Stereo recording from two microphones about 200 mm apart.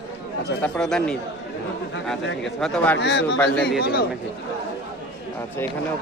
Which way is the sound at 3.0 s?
55° left (ahead or behind).